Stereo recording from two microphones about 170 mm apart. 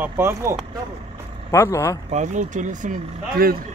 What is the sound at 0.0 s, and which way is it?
Speech, 15° right (ahead or behind).